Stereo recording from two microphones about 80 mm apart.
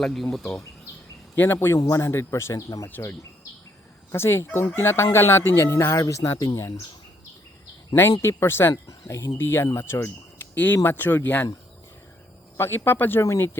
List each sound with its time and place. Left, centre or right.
0.0 s speech: centre
1.4 s speech: left
4.1 s speech: left
8.2 s speech: left
8.7 s speech: left
9.4 s speech: left
12.5 s speech: left